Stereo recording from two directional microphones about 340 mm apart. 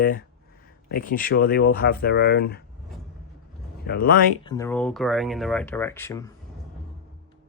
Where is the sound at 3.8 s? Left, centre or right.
Left.